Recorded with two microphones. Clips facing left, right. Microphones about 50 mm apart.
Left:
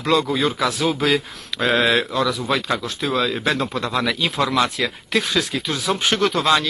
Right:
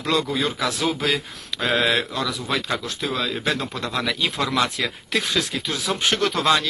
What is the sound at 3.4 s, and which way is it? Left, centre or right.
Speech, left.